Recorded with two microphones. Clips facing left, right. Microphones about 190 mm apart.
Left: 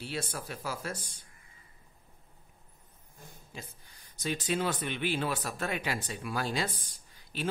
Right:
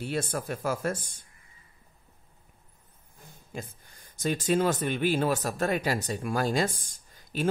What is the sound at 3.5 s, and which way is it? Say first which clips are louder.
Speech: right 9 dB; 50° right (ahead or behind).